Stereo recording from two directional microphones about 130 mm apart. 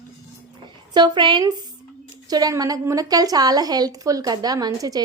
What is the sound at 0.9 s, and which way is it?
A woman's voice, 35° right (ahead or behind).